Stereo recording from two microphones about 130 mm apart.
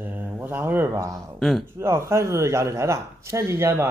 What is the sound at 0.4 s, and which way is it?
A man's voice, 15° right (ahead or behind).